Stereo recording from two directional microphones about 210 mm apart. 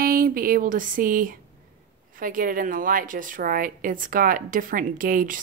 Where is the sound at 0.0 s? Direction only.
45° right (ahead or behind).